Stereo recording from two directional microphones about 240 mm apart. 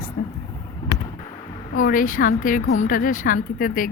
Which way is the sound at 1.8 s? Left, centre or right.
Left.